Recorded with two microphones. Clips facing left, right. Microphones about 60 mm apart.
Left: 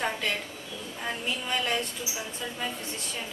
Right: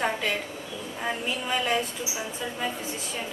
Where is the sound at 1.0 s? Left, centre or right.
Centre.